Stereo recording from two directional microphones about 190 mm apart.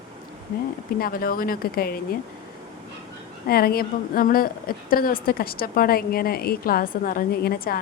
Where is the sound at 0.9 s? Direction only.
50° left (ahead or behind).